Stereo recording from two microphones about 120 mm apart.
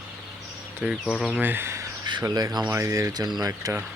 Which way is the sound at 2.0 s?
35° right (ahead or behind).